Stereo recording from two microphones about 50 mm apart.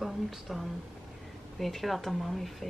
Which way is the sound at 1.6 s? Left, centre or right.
Centre.